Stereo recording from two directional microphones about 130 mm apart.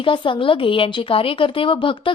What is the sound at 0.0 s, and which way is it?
A woman's voice, 40° left (ahead or behind).